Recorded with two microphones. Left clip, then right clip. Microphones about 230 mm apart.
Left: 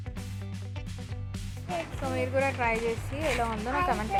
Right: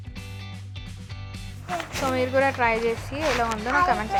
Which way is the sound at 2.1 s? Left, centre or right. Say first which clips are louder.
Right 6 dB; right.